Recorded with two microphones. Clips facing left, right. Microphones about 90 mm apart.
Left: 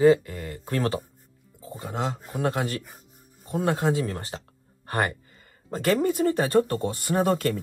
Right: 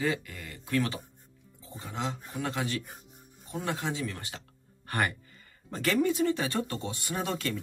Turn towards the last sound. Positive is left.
turn(degrees=50)  # may be behind; listen again after turning